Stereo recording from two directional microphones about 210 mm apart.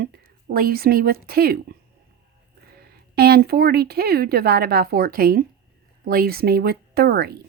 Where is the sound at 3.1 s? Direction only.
50° right (ahead or behind).